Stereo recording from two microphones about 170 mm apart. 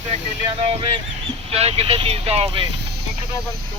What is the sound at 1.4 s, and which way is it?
Speech, 35° right (ahead or behind).